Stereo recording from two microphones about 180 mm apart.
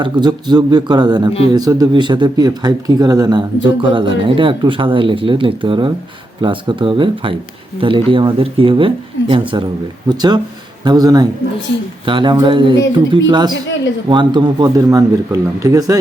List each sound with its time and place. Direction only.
0.0 s speech: 25° right (ahead or behind)
1.3 s speech: 35° left (ahead or behind)
1.5 s speech: 20° right (ahead or behind)